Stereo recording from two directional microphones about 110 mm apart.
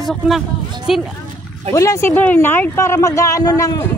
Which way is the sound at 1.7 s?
30° left (ahead or behind).